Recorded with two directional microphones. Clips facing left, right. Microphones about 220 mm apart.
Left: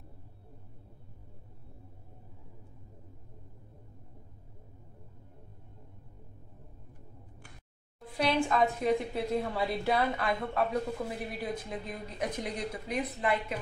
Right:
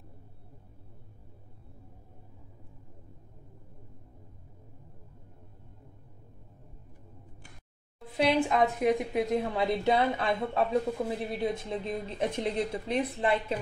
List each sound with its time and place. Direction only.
8.2 s a woman's voice: 20° right (ahead or behind)